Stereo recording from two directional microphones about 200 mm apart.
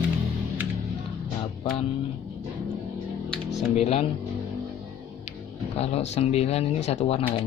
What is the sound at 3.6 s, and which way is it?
Speech, 35° left (ahead or behind).